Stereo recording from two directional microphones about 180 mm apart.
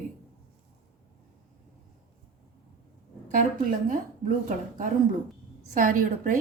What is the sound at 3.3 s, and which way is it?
A woman's voice, 50° right (ahead or behind).